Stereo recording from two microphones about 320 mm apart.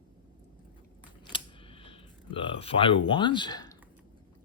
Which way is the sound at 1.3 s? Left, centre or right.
Centre.